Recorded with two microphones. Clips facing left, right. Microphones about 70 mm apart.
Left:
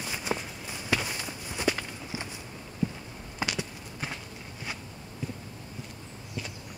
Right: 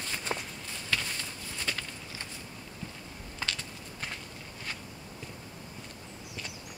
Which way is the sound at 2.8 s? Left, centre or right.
Centre.